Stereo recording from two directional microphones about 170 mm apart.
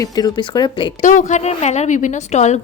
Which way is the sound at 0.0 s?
25° left (ahead or behind).